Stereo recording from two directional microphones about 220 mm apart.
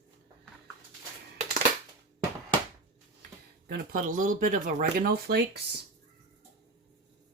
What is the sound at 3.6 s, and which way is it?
Speech, 40° right (ahead or behind).